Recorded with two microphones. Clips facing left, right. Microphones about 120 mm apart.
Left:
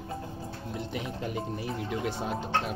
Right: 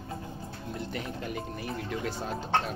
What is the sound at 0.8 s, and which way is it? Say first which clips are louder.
Speech: left 1 dB; 15° left (ahead or behind).